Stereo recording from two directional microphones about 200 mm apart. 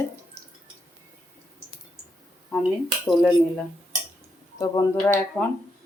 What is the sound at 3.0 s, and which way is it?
Speech, centre (ahead or behind).